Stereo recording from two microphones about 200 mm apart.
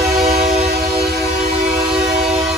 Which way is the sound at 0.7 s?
55° right (ahead or behind).